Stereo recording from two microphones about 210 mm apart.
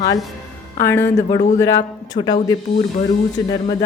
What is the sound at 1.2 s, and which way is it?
Speech, 30° left (ahead or behind).